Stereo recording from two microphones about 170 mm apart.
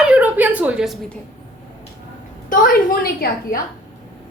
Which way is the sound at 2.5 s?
60° left (ahead or behind).